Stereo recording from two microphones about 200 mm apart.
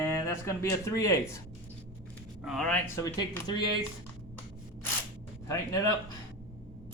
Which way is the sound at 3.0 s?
20° left (ahead or behind).